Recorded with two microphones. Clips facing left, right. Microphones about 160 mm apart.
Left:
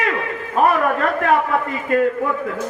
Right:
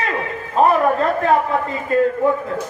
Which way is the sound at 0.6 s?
30° right (ahead or behind).